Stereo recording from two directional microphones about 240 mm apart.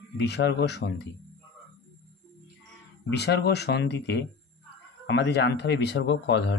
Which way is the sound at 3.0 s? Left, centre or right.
Left.